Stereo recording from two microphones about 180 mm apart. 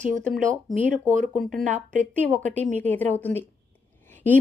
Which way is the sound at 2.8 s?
10° left (ahead or behind).